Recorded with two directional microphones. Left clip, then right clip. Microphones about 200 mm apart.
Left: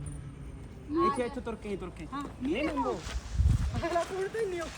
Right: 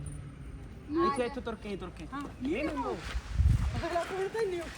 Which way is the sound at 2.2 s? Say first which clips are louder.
Left 2 dB; centre (ahead or behind).